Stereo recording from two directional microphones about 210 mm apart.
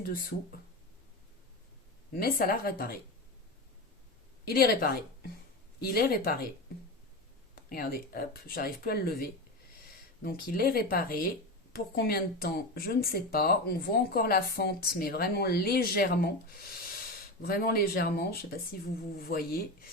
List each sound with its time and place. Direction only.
0.0 s speech: 45° left (ahead or behind)
2.1 s speech: 45° left (ahead or behind)
4.4 s a woman's voice: 45° left (ahead or behind)
7.7 s speech: 45° left (ahead or behind)